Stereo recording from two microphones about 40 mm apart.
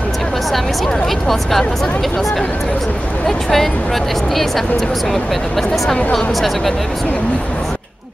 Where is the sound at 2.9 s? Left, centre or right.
Left.